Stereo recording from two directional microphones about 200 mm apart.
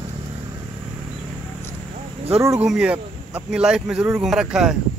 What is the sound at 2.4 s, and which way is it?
Speech, 15° right (ahead or behind).